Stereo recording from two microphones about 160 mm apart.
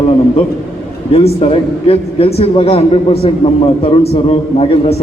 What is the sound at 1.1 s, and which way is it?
A man's voice, 40° left (ahead or behind).